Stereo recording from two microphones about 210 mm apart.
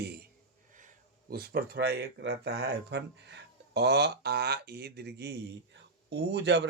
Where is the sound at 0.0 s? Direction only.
50° right (ahead or behind).